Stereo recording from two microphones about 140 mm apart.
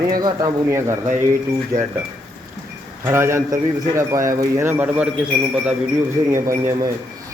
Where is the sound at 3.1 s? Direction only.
20° right (ahead or behind).